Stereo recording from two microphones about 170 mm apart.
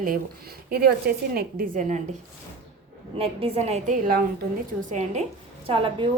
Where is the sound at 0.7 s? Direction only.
65° right (ahead or behind); by 2.0 s 50° right (ahead or behind).